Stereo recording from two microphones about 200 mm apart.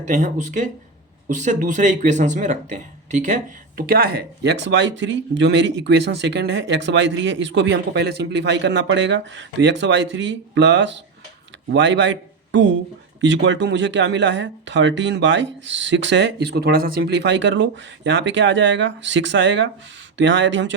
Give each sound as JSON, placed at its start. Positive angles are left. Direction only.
{"t": 0.0, "sound": "speech", "side_deg": -35}
{"t": 3.8, "sound": "a man's voice", "side_deg": -50}